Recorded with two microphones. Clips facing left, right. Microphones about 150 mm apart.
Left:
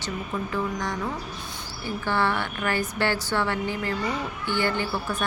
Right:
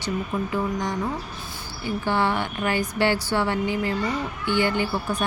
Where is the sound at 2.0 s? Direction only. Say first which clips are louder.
Right 2 dB; 15° right (ahead or behind).